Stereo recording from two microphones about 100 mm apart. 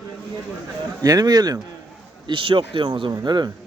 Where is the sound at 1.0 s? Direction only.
40° right (ahead or behind).